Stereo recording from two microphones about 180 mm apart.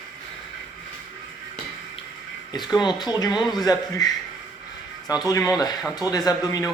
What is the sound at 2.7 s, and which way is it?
Speech, 25° left (ahead or behind).